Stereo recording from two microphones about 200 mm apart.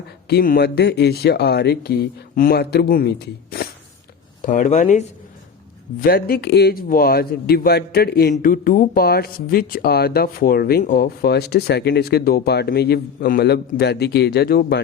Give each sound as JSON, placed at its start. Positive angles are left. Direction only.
{"t": 0.3, "sound": "a man's voice", "side_deg": 50}
{"t": 4.4, "sound": "speech", "side_deg": 40}
{"t": 6.0, "sound": "a man's voice", "side_deg": 50}